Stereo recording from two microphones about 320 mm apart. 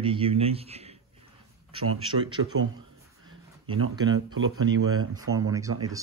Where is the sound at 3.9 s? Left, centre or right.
Centre.